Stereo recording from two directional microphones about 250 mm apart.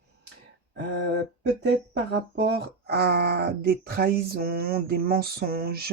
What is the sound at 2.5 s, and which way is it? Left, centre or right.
Speech, right.